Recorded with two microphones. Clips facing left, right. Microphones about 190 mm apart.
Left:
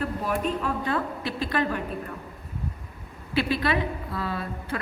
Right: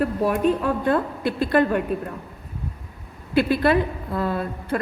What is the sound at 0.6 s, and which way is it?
A woman's voice, 50° right (ahead or behind).